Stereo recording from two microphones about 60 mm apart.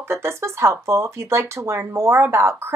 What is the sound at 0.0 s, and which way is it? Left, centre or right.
A woman's voice, right.